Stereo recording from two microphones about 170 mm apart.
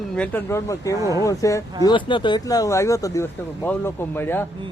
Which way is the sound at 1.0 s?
20° right (ahead or behind).